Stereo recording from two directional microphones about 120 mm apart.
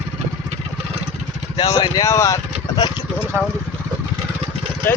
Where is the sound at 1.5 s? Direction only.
30° left (ahead or behind).